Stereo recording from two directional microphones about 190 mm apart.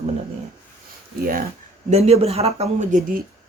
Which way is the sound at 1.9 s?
35° right (ahead or behind).